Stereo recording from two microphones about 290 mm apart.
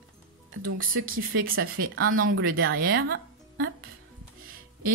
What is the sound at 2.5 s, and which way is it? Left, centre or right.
Speech, right.